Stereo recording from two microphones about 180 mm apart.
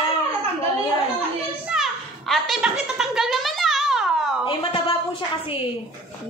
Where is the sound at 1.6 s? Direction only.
5° right (ahead or behind).